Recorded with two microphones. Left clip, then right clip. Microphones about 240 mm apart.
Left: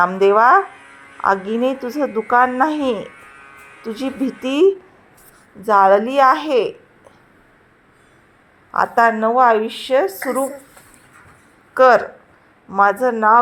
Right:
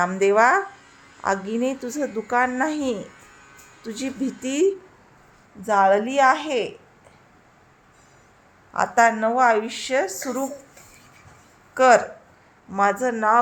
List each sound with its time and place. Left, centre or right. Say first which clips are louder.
0.0 s speech: left 5 dB; centre
0.7 s a sound: left 7 dB; centre
1.3 s speech: left 6 dB; centre
1.7 s a woman's voice: left 6 dB; centre
2.3 s speech: left 7 dB; centre
2.6 s music: left 6 dB; centre
3.8 s a woman's voice: left 5 dB; centre
8.7 s a woman's voice: left 4 dB; centre
11.7 s a woman's voice: left 4 dB; centre